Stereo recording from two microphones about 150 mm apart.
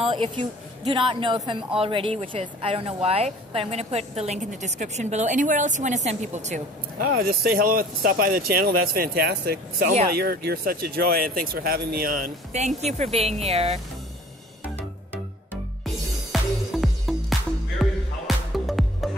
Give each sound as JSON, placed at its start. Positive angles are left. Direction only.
{"t": 0.0, "sound": "a woman's voice", "side_deg": -35}
{"t": 7.2, "sound": "a woman's voice", "side_deg": -85}
{"t": 15.8, "sound": "music", "side_deg": 0}